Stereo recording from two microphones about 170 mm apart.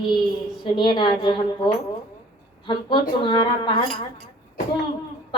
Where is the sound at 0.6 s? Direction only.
30° left (ahead or behind).